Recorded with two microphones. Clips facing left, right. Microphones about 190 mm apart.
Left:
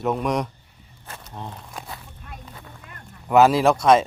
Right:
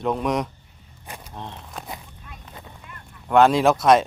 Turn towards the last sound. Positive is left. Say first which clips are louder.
# even
turn(degrees=0)  # may be behind; listen again after turning